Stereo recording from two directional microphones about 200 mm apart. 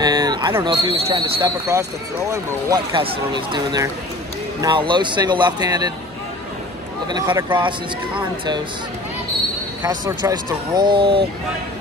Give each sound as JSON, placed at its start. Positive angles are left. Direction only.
{"t": 0.0, "sound": "a sound", "side_deg": -20}
{"t": 0.7, "sound": "speech", "side_deg": -25}
{"t": 7.1, "sound": "speech", "side_deg": -20}
{"t": 9.8, "sound": "speech", "side_deg": -15}